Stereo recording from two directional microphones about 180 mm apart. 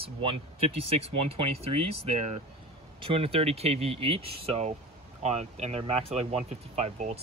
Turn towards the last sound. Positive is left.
turn(degrees=-35)  # may be behind; listen again after turning